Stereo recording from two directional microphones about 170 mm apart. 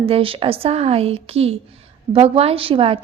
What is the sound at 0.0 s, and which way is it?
A woman's voice, 35° right (ahead or behind).